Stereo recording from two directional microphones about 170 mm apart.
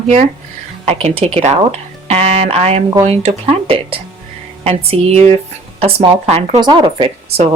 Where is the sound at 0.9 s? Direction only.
35° right (ahead or behind).